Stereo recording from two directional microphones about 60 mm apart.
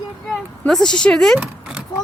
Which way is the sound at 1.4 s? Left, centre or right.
Centre.